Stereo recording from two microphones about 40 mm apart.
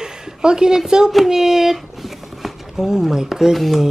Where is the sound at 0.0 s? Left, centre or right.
Centre.